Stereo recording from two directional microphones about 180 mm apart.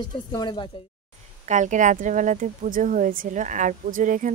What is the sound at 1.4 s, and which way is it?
Speech, 45° right (ahead or behind).